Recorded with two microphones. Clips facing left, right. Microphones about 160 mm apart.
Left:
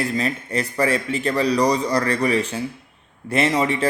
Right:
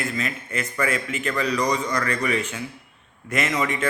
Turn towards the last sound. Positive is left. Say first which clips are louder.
# left 5 dB
turn(degrees=30)  # may be behind; listen again after turning